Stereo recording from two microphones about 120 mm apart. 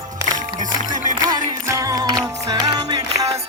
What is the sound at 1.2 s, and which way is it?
Music, 30° right (ahead or behind).